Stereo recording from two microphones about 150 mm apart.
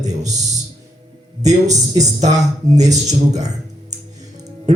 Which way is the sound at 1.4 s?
50° right (ahead or behind).